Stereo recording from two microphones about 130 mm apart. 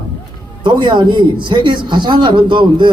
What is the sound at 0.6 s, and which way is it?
A man's voice, 35° right (ahead or behind).